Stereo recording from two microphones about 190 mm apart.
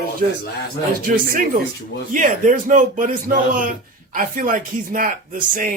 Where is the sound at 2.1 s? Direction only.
45° right (ahead or behind).